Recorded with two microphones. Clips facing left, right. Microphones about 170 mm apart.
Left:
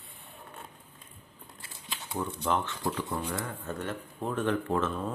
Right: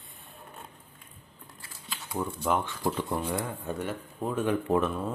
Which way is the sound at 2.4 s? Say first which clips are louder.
Right 2 dB; 10° right (ahead or behind).